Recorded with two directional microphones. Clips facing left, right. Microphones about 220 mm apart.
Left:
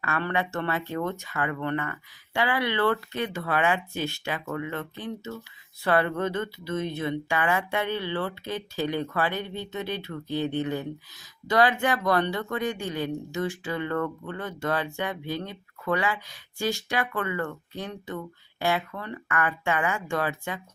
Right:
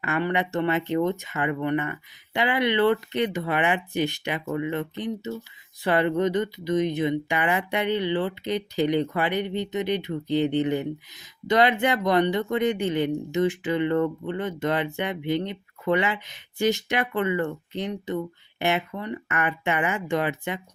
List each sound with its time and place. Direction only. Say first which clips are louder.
0.0 s speech: right 3 dB; 15° right (ahead or behind)